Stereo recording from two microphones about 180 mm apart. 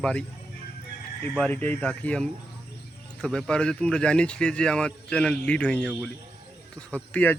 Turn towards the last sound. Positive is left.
turn(degrees=10)  # may be behind; listen again after turning